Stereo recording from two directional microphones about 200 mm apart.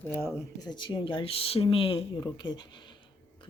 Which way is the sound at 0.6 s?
20° left (ahead or behind).